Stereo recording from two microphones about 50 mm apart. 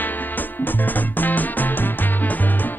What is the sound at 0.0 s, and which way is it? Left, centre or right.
Music, left.